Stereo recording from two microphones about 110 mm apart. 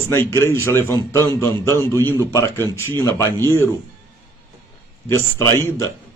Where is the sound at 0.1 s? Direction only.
25° left (ahead or behind).